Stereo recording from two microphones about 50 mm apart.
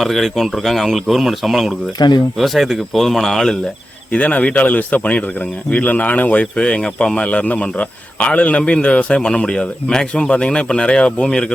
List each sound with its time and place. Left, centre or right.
0.0 s speech: centre
4.1 s a man's voice: left
7.2 s a man's voice: left